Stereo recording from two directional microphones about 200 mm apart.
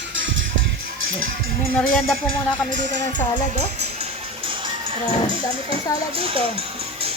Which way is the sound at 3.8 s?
30° right (ahead or behind).